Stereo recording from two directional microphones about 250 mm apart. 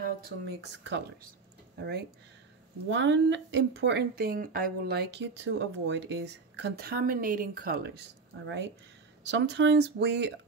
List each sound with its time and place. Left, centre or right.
0.0 s speech: right